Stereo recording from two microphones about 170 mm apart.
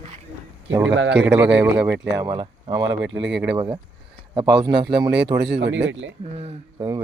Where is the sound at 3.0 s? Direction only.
90° right.